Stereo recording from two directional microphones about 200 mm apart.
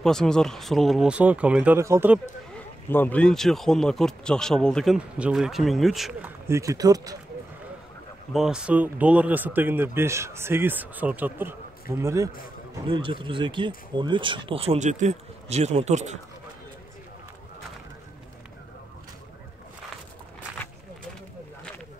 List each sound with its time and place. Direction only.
0.0 s speech: 5° left (ahead or behind)
2.9 s speech: 10° left (ahead or behind)
6.4 s speech: 15° right (ahead or behind)
8.3 s speech: centre (ahead or behind)
12.8 s speech: 25° right (ahead or behind)